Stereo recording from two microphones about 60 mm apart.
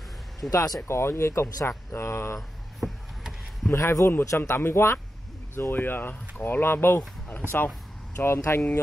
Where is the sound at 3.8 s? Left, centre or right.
Left.